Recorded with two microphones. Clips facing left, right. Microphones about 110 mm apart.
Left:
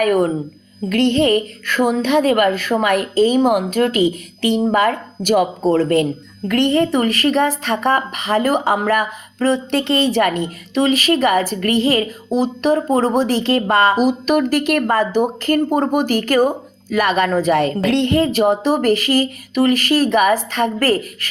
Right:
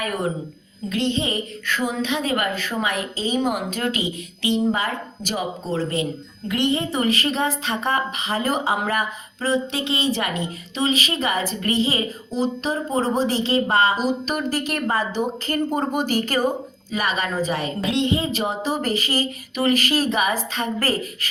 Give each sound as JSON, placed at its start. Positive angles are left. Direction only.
{"t": 0.0, "sound": "a woman's voice", "side_deg": 55}